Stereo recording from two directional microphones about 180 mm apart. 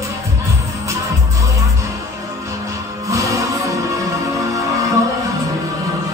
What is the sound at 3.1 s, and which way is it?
Music, 15° right (ahead or behind).